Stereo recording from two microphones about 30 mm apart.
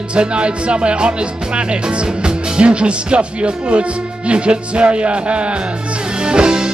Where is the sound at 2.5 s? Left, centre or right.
Right.